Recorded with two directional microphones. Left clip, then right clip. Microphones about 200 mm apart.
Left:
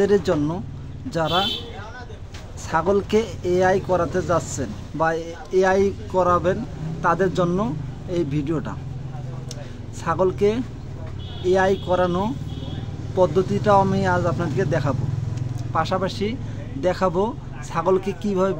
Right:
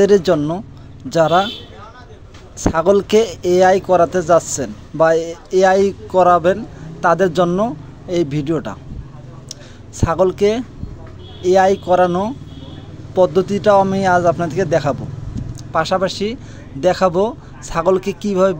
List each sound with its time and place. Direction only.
0.0 s speech: 35° right (ahead or behind)
2.6 s speech: 35° right (ahead or behind)
9.9 s speech: 35° right (ahead or behind)